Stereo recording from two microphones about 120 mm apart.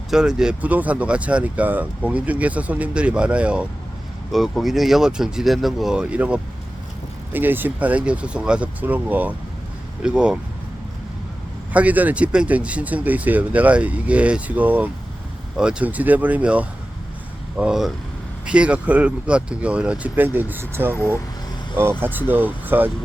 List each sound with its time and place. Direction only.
0.1 s speech: 5° right (ahead or behind)
11.7 s speech: 10° right (ahead or behind)
20.9 s speech: 20° left (ahead or behind)
21.8 s speech: 20° right (ahead or behind)